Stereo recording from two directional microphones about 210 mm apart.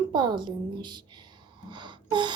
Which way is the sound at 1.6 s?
20° right (ahead or behind).